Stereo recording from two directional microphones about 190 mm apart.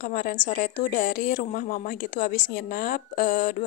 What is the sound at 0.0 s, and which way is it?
A woman's voice, 50° left (ahead or behind).